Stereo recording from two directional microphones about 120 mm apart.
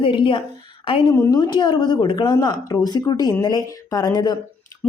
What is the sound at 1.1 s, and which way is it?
Speech, 25° left (ahead or behind).